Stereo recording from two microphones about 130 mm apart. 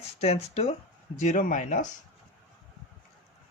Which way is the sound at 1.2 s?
75° left (ahead or behind).